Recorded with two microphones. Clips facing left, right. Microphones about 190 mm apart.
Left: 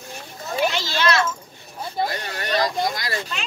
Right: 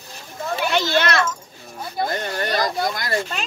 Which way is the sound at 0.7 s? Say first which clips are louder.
Right 3 dB; 60° right (ahead or behind).